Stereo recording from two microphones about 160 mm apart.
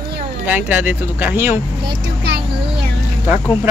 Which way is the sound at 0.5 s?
10° right (ahead or behind).